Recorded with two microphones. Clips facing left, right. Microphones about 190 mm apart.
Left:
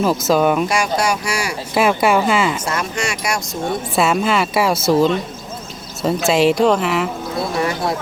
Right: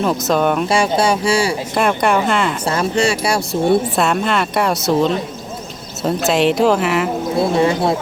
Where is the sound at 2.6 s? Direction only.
30° right (ahead or behind).